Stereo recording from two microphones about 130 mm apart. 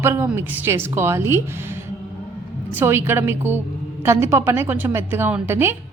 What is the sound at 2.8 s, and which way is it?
A woman's voice, 15° right (ahead or behind).